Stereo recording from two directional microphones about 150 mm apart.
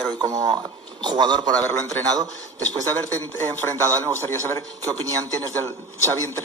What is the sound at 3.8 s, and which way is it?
Speech, 20° right (ahead or behind).